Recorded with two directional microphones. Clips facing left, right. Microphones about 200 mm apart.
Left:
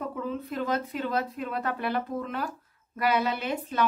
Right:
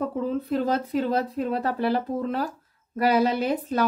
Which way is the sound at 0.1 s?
30° right (ahead or behind).